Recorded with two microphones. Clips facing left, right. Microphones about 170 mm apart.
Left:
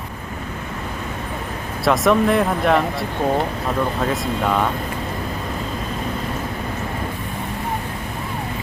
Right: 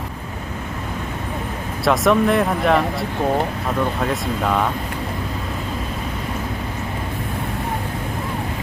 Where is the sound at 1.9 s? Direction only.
Centre (ahead or behind).